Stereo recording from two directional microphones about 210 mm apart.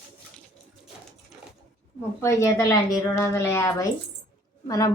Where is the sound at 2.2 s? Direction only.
15° left (ahead or behind).